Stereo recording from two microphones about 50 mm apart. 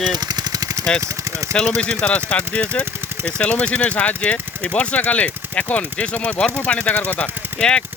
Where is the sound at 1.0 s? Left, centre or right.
Right.